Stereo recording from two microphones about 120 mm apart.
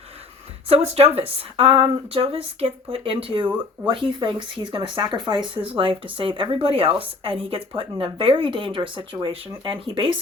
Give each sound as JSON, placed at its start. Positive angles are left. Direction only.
{"t": 0.7, "sound": "speech", "side_deg": -60}